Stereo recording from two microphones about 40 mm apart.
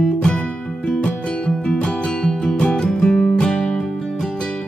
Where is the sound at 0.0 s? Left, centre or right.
Left.